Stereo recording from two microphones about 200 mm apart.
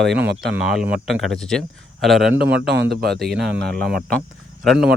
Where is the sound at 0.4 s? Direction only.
5° right (ahead or behind).